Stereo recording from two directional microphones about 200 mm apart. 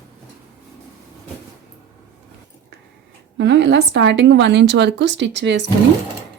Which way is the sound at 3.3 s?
60° right (ahead or behind).